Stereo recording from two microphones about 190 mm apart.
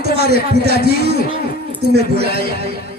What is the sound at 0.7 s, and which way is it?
Speech, 60° right (ahead or behind).